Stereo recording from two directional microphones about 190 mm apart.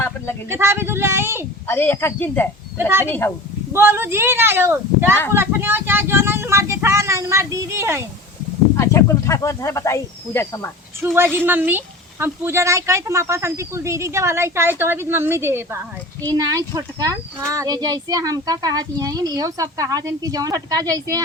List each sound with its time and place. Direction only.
0.5 s speech: 15° right (ahead or behind)
1.6 s speech: 10° left (ahead or behind)
2.7 s speech: 10° right (ahead or behind)
3.1 s speech: 10° left (ahead or behind)
3.7 s speech: 10° right (ahead or behind)
8.7 s speech: 15° left (ahead or behind)
11.0 s a child's voice: 10° right (ahead or behind)